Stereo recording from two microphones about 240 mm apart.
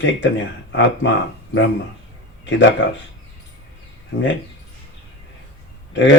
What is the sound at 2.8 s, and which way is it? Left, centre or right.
Speech, left.